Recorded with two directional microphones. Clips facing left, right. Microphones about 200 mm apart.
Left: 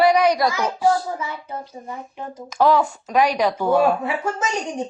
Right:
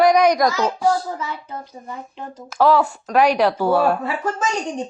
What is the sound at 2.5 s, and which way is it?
A woman's voice, 5° right (ahead or behind).